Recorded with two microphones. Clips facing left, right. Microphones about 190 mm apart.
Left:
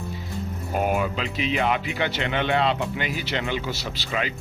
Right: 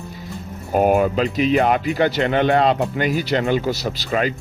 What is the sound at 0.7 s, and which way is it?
Music, 45° right (ahead or behind).